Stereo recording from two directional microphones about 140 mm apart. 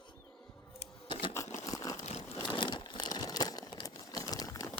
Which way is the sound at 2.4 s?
35° left (ahead or behind).